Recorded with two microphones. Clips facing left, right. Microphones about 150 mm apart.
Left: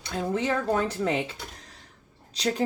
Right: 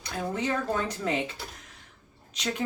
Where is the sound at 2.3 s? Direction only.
35° left (ahead or behind).